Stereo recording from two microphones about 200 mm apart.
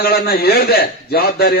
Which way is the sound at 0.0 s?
50° left (ahead or behind).